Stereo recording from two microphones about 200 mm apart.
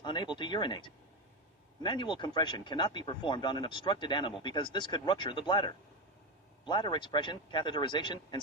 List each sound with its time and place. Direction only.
0.0 s speech: 25° left (ahead or behind)